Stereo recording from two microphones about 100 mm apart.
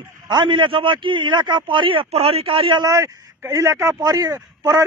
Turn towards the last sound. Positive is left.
turn(degrees=-35)  # may be behind; listen again after turning